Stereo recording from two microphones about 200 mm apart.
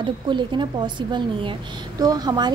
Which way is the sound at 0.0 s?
25° right (ahead or behind).